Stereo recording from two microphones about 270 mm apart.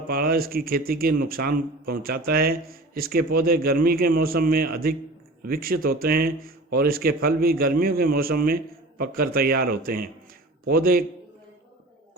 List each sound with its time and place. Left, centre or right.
0.1 s speech: right